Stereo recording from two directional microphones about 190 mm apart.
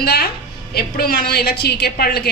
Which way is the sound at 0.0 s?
55° left (ahead or behind).